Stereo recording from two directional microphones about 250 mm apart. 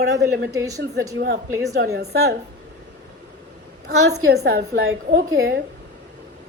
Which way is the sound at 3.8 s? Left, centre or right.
Right.